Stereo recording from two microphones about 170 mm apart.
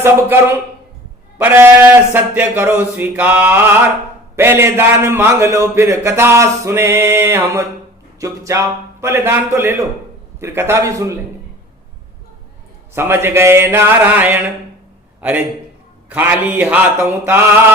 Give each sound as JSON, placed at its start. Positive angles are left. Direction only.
{"t": 0.0, "sound": "a man's voice", "side_deg": -15}
{"t": 12.9, "sound": "a man's voice", "side_deg": -15}